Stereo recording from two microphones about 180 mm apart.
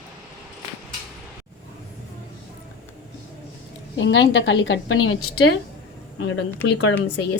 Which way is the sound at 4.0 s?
90° left.